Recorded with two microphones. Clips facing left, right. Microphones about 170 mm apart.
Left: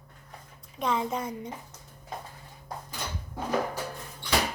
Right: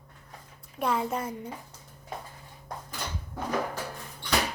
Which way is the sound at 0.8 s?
10° right (ahead or behind).